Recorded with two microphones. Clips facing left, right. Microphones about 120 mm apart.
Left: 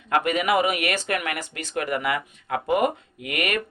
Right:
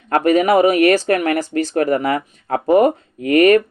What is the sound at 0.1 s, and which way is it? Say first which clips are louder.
Speech: right 8 dB; 40° right (ahead or behind).